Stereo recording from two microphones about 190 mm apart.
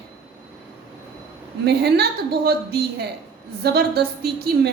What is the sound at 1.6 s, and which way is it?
A woman's voice, 55° right (ahead or behind).